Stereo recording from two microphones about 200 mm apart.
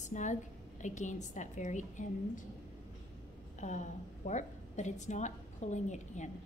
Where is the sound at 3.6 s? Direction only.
35° left (ahead or behind).